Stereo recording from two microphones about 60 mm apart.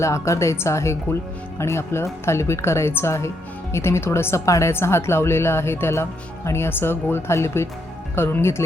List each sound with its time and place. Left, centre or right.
0.0 s speech: left
4.7 s speech: left